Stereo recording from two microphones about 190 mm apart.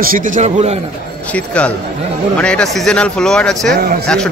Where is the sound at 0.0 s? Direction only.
45° right (ahead or behind).